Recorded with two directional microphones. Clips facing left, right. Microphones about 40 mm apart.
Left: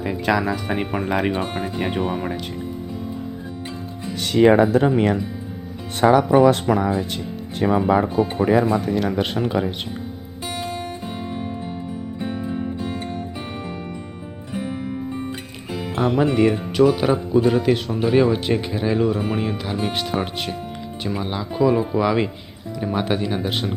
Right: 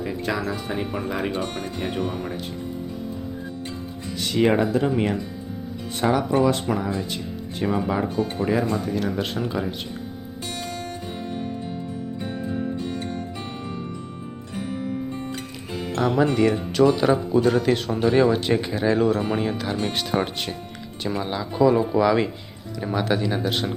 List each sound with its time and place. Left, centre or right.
0.0 s speech: left
0.9 s speech: left
1.3 s speech: left
4.2 s speech: left
5.9 s speech: left
8.1 s speech: left
8.9 s speech: left
9.1 s speech: left
10.4 s music: left
12.2 s music: centre
13.4 s music: left
15.7 s speech: centre